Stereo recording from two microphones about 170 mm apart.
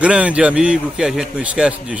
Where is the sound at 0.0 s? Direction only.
5° right (ahead or behind).